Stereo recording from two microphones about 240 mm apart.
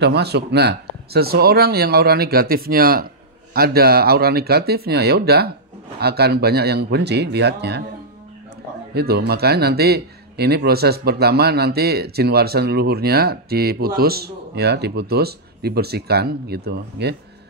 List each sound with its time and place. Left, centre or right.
0.0 s a man's voice: right
8.9 s a man's voice: right